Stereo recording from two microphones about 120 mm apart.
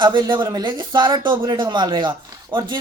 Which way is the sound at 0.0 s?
40° right (ahead or behind).